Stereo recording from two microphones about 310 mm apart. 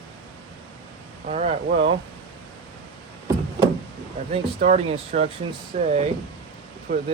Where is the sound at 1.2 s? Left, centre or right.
Right.